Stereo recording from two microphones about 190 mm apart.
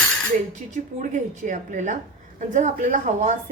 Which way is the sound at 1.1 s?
40° right (ahead or behind).